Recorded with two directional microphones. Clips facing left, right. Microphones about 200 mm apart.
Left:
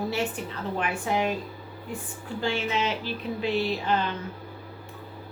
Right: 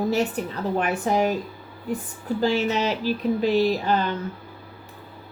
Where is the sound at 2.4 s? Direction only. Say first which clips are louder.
Right 5 dB; 40° right (ahead or behind).